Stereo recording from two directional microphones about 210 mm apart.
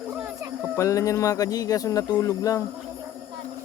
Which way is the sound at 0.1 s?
10° right (ahead or behind).